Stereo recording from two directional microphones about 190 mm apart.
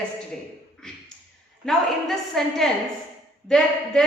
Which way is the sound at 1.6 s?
Centre (ahead or behind).